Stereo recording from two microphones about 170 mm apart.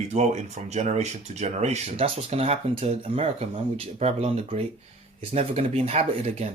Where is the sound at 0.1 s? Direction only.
40° right (ahead or behind).